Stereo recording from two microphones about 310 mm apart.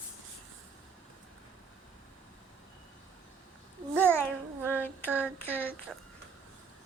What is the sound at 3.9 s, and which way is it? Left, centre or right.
Child singing, centre.